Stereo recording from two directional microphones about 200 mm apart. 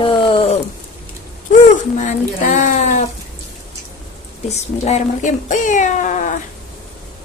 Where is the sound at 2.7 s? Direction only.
35° left (ahead or behind).